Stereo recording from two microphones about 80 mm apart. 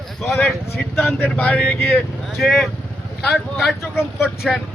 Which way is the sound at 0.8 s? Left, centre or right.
Left.